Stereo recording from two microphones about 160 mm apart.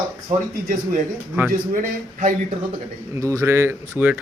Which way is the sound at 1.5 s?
55° right (ahead or behind).